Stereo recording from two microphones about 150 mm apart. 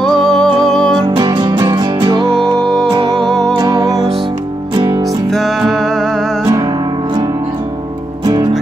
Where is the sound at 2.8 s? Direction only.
30° right (ahead or behind).